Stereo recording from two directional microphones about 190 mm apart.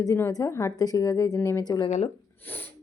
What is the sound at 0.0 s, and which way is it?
A woman's voice, 15° left (ahead or behind).